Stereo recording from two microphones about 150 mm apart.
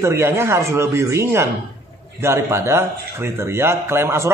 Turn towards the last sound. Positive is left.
turn(degrees=-15)  # may be behind; listen again after turning